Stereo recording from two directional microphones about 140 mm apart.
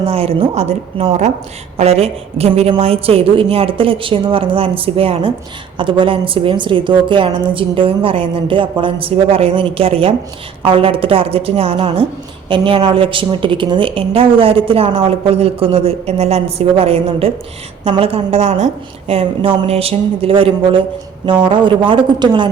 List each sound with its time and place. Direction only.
0.0 s a woman's voice: 45° right (ahead or behind)